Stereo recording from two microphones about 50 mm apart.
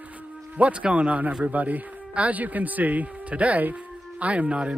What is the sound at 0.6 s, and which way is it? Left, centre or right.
Speech, right.